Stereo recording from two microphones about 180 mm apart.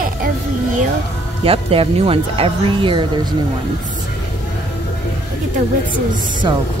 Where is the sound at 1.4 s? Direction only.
30° right (ahead or behind).